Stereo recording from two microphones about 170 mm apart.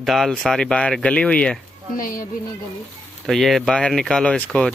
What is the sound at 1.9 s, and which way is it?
Speech, 55° left (ahead or behind).